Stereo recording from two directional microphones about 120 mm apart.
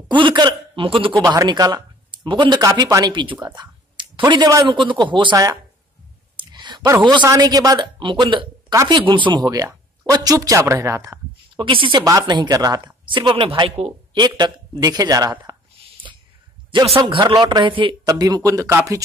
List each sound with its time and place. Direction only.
0.1 s speech: 40° right (ahead or behind)
1.3 s speech: 35° right (ahead or behind)
3.1 s speech: 40° right (ahead or behind)
3.5 s a sound: 40° right (ahead or behind)
4.6 s speech: 40° right (ahead or behind)
6.3 s clicking: 40° right (ahead or behind)
7.0 s speech: 40° right (ahead or behind)
11.5 s speech: 45° right (ahead or behind)
12.0 s speech: 30° right (ahead or behind); by 13.9 s 55° right (ahead or behind)
14.1 s speech: 40° right (ahead or behind)
16.8 s speech: 50° right (ahead or behind); by 19.0 s 25° right (ahead or behind)